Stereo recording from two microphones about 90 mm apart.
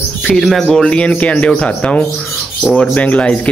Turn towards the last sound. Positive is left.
turn(degrees=15)  # may be behind; listen again after turning